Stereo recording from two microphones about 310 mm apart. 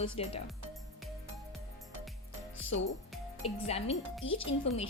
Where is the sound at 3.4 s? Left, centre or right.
Centre.